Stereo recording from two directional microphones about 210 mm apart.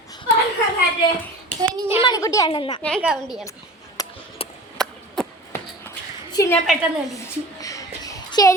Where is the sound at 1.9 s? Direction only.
20° left (ahead or behind).